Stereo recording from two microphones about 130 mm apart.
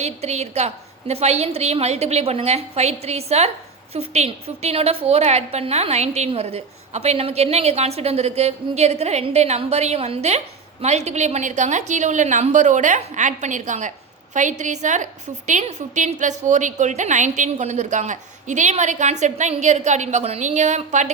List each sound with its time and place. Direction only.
0.0 s a woman's voice: 55° right (ahead or behind)